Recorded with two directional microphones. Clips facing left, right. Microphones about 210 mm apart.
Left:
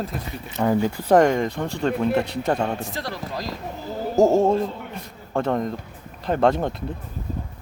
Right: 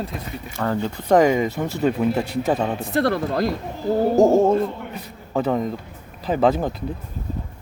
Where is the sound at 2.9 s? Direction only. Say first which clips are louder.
Right 10 dB; 60° right (ahead or behind).